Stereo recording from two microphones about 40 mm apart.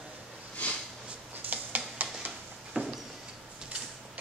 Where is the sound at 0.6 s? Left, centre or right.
Left.